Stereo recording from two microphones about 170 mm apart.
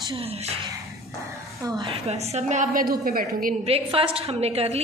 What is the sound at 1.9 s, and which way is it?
A woman's voice, 40° right (ahead or behind).